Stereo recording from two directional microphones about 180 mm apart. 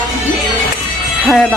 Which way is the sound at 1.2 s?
Centre (ahead or behind).